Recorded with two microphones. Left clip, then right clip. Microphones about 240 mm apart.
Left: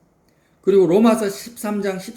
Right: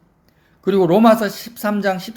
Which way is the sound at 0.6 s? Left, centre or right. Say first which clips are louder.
Right 1 dB; right.